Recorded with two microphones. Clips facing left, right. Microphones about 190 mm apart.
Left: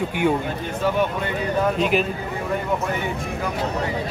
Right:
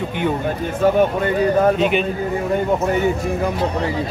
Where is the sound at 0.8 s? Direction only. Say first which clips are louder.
Right 7 dB; 50° right (ahead or behind).